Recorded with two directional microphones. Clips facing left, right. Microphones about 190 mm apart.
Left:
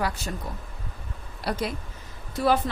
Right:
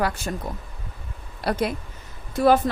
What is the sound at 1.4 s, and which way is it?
Speech, 60° right (ahead or behind).